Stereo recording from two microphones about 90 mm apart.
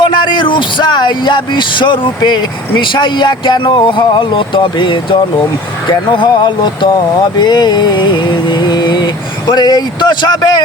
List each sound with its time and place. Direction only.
0.0 s speech: 60° left (ahead or behind)